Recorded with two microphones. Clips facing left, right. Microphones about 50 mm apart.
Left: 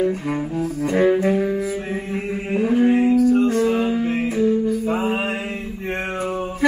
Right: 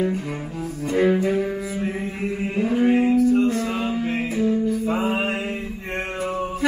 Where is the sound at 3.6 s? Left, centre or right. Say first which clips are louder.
Left 5 dB; centre.